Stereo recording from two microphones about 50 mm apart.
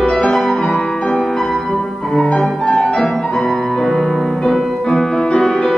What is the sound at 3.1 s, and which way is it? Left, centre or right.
Music, centre.